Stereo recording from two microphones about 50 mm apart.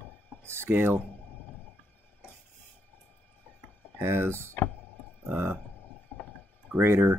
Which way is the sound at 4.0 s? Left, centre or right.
Right.